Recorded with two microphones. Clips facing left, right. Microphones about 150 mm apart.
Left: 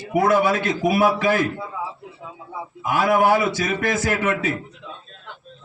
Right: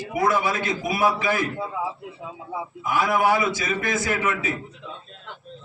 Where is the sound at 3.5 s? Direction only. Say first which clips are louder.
Left 3 dB; 60° left (ahead or behind).